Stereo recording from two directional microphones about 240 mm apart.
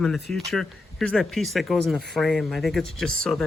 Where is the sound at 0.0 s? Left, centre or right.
Centre.